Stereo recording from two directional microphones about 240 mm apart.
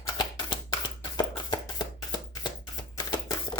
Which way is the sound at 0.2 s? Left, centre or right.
Centre.